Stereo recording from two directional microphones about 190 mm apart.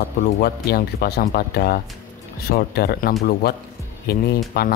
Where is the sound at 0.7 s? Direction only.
55° left (ahead or behind).